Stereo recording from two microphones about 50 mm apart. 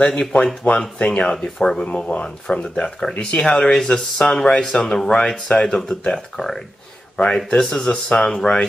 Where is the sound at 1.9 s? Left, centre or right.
Left.